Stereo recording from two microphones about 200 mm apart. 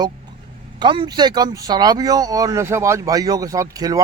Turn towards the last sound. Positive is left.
turn(degrees=-15)  # may be behind; listen again after turning